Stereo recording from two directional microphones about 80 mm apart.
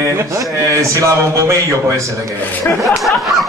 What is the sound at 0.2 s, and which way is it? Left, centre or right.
Speech, right.